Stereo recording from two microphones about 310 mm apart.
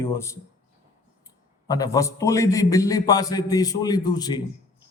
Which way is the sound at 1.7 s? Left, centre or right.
Centre.